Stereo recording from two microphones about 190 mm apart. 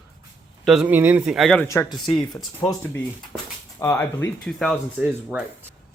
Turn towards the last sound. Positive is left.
turn(degrees=-5)  # may be behind; listen again after turning